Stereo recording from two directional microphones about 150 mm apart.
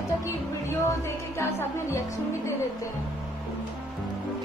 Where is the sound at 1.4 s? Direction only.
15° left (ahead or behind).